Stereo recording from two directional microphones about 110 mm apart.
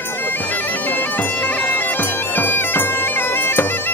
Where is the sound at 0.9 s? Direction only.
15° left (ahead or behind).